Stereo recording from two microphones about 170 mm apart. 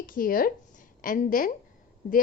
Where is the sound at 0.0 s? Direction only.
55° left (ahead or behind).